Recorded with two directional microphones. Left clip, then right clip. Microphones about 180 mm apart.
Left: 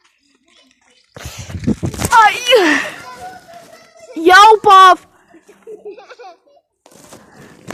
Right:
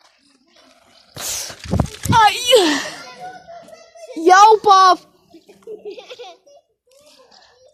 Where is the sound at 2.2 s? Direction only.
10° left (ahead or behind).